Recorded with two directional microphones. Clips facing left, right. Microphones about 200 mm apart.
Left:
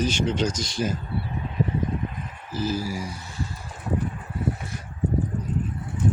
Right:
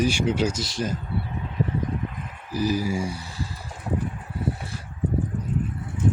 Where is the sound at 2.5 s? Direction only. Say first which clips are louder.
Right 3 dB; 15° right (ahead or behind).